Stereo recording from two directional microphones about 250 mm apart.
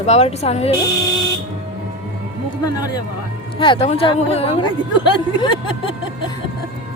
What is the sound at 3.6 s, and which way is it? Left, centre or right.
A woman's voice, left.